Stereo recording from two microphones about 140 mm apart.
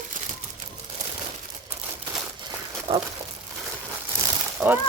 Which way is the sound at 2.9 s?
40° right (ahead or behind).